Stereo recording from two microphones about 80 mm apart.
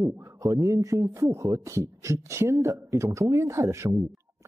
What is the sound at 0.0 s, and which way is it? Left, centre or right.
Speech, right.